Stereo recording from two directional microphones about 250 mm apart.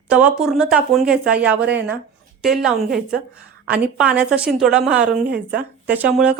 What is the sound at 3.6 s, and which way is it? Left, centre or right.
Speech, centre.